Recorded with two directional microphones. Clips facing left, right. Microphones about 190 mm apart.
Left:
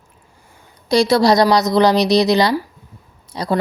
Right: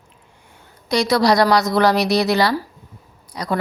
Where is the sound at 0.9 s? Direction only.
30° left (ahead or behind).